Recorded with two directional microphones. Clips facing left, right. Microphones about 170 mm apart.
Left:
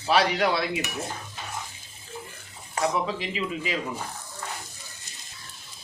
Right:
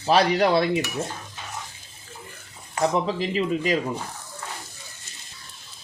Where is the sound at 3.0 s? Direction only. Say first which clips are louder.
Right 5 dB; 40° right (ahead or behind).